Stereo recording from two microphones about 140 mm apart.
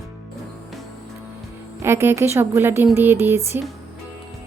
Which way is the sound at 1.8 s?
20° right (ahead or behind).